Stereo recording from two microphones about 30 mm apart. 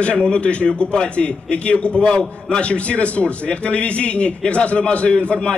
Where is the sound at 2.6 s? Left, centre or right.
Left.